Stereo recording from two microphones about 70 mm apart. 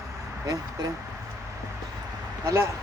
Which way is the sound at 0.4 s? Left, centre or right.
Right.